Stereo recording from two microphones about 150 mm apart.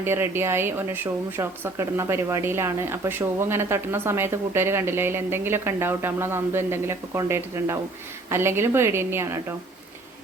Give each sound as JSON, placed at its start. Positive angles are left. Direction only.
{"t": 0.0, "sound": "speech", "side_deg": -15}